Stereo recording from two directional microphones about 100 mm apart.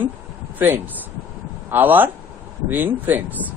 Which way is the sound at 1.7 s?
20° right (ahead or behind).